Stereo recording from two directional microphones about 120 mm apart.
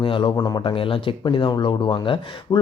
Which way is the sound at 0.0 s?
45° left (ahead or behind).